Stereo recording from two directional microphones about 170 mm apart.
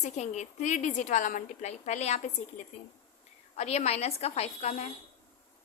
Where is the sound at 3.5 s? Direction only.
40° left (ahead or behind).